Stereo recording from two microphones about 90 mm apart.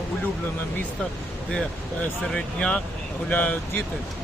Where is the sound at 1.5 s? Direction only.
10° left (ahead or behind).